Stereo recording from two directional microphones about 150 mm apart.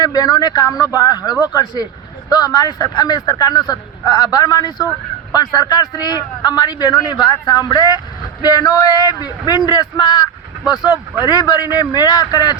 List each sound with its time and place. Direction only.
0.0 s a man's voice: 25° left (ahead or behind)
11.3 s a man's voice: 25° left (ahead or behind)